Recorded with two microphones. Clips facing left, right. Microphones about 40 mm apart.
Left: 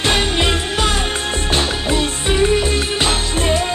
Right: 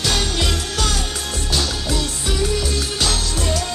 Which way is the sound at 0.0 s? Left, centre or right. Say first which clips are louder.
Left 5 dB; left.